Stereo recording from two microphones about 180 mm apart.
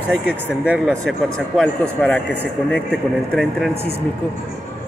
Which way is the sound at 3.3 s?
5° left (ahead or behind).